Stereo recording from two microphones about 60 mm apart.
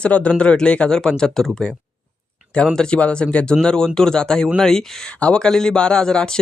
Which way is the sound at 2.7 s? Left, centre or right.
Centre.